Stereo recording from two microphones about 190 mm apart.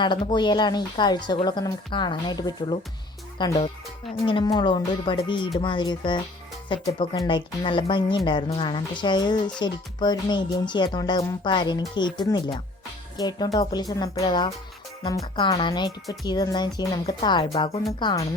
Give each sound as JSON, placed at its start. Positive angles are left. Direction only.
{"t": 0.0, "sound": "speech", "side_deg": 25}